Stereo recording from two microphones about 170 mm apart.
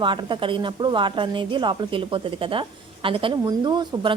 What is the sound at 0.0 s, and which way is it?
A woman's voice, 30° right (ahead or behind).